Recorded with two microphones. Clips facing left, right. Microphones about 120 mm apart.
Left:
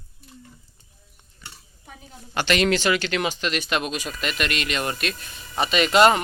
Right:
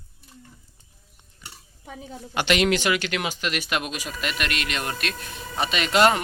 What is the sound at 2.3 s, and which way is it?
Speech, 15° right (ahead or behind).